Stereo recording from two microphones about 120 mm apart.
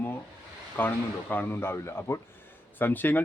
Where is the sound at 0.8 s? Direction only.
15° left (ahead or behind).